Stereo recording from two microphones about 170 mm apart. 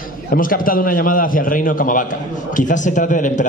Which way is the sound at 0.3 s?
55° left (ahead or behind).